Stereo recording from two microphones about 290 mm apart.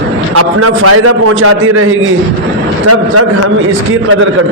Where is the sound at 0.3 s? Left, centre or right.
Right.